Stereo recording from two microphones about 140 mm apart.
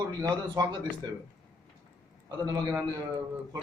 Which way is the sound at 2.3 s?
25° right (ahead or behind).